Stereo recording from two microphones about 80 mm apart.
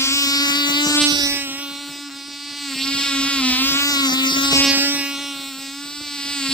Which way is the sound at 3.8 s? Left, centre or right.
Left.